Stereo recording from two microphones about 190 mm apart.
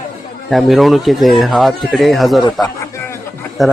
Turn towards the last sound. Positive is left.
turn(degrees=0)  # may be behind; listen again after turning